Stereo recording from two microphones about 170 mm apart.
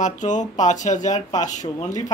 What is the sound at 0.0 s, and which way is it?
Speech, 45° left (ahead or behind).